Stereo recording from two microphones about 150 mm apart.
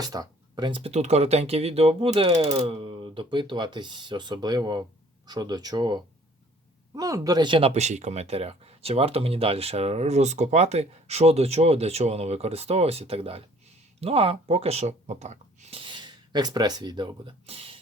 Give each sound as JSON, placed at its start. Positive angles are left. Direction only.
{"t": 0.0, "sound": "speech", "side_deg": -25}
{"t": 7.7, "sound": "speech", "side_deg": -50}